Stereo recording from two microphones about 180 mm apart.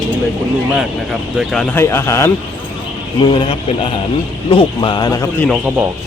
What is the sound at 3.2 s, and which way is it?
A man's voice, 30° left (ahead or behind).